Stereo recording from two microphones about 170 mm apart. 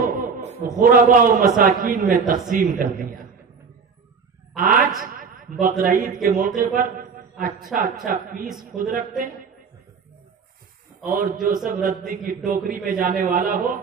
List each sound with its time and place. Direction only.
0.0 s chuckle: 55° right (ahead or behind)
0.7 s a man's voice: 55° right (ahead or behind)
4.6 s a man's voice: 55° right (ahead or behind)
11.1 s a man's voice: 50° right (ahead or behind)